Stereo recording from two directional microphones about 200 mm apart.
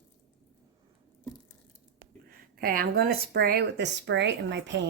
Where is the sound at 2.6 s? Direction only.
45° right (ahead or behind).